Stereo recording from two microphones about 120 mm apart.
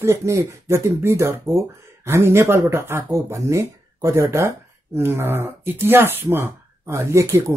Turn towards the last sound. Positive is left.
turn(degrees=-25)  # may be behind; listen again after turning